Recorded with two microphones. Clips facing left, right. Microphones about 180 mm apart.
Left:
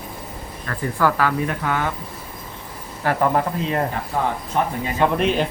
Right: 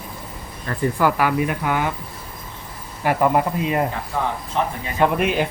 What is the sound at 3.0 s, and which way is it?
Speech, 15° right (ahead or behind).